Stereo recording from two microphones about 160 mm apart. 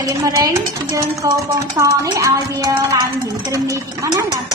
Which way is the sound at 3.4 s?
20° right (ahead or behind).